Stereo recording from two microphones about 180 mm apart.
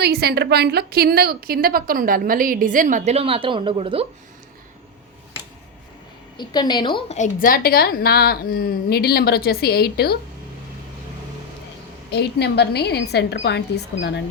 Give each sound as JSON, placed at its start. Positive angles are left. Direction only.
{"t": 0.0, "sound": "a woman's voice", "side_deg": -60}
{"t": 6.3, "sound": "a woman's voice", "side_deg": 25}
{"t": 7.2, "sound": "a woman's voice", "side_deg": 50}
{"t": 12.1, "sound": "speech", "side_deg": 65}